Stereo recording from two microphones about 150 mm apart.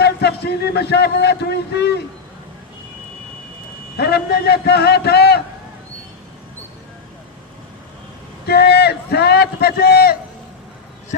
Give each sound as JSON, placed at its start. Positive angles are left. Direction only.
{"t": 0.0, "sound": "speech", "side_deg": 90}
{"t": 3.9, "sound": "a man's voice", "side_deg": 90}
{"t": 8.4, "sound": "a sound", "side_deg": 90}